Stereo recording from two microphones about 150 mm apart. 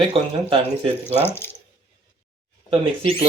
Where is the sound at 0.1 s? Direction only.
35° right (ahead or behind).